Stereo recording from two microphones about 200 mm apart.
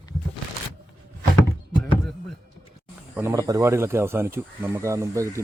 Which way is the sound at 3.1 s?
15° right (ahead or behind).